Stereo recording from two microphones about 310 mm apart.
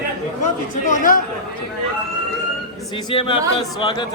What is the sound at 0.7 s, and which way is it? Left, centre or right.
Speech, left.